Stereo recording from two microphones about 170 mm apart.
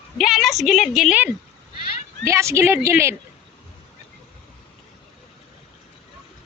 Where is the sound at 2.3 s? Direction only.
15° right (ahead or behind).